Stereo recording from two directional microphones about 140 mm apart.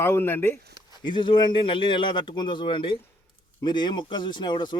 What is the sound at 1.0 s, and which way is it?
A man's voice, 35° left (ahead or behind).